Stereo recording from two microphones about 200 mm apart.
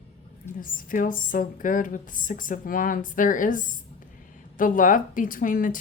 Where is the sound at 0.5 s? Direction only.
45° left (ahead or behind).